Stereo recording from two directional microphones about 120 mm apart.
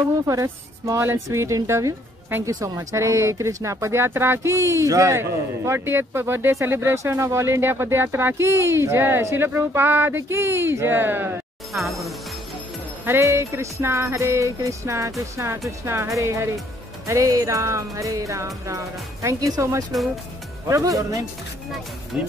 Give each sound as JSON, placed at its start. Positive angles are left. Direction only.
{"t": 0.3, "sound": "a woman's voice", "side_deg": -25}
{"t": 11.7, "sound": "speech", "side_deg": 0}
{"t": 13.0, "sound": "a woman's voice", "side_deg": -20}
{"t": 22.1, "sound": "speech", "side_deg": -5}